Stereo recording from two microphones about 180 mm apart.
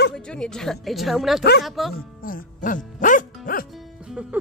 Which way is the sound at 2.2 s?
50° left (ahead or behind).